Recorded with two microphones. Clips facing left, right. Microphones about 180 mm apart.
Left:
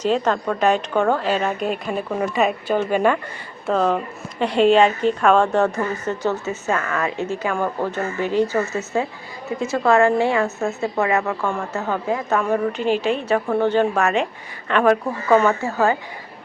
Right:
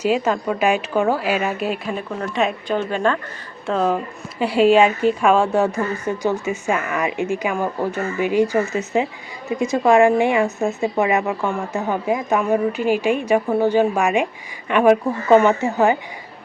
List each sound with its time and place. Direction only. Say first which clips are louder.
0.0 s a woman's voice: right 1 dB; 10° right (ahead or behind); by 3.2 s 10° left (ahead or behind)
3.7 s a woman's voice: even; centre (ahead or behind)